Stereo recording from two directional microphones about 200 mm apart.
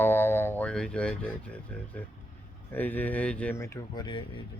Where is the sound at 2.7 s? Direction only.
10° left (ahead or behind); by 4.4 s 25° left (ahead or behind).